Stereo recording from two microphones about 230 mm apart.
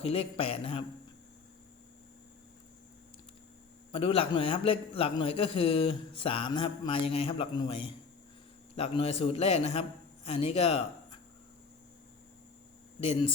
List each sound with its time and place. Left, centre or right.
0.0 s a man's voice: left
3.9 s a man's voice: left
13.0 s a man's voice: left